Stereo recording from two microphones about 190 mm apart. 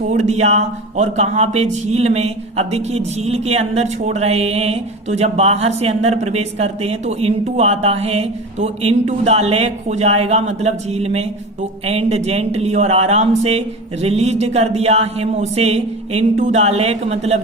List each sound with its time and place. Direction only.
0.1 s speech: 35° right (ahead or behind)